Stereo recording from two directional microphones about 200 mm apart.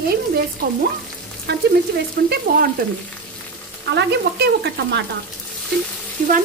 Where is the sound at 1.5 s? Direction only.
55° right (ahead or behind).